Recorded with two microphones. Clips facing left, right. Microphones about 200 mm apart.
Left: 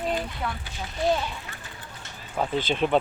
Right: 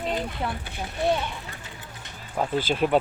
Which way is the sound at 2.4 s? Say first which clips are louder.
Right 1 dB; 5° right (ahead or behind).